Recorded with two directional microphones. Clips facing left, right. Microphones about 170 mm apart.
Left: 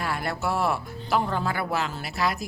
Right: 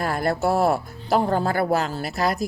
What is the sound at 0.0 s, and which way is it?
Speech, 40° right (ahead or behind).